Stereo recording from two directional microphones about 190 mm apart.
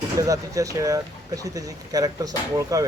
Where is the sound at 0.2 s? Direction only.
15° right (ahead or behind).